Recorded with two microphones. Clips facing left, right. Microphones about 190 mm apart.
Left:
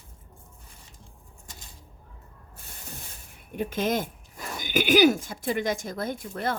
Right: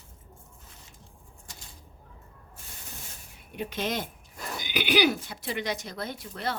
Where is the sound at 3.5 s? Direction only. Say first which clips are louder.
Left 5 dB; 50° left (ahead or behind).